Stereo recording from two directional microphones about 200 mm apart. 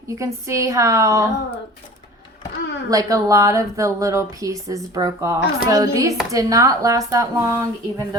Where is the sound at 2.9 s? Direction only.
15° right (ahead or behind).